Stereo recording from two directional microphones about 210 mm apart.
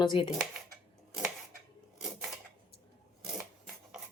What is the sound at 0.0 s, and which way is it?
Speech, 20° left (ahead or behind).